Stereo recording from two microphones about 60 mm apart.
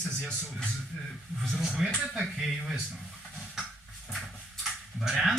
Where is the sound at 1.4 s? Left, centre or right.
Centre.